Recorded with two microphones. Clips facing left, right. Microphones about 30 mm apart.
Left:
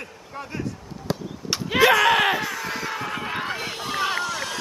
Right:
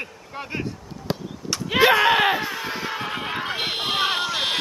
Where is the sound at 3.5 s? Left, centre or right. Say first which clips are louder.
Right 4 dB; right.